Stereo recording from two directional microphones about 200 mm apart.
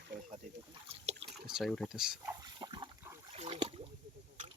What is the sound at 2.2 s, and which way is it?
Pig, 20° right (ahead or behind).